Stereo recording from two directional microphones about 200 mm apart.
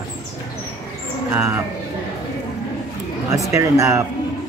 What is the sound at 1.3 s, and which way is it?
Speech, 10° right (ahead or behind).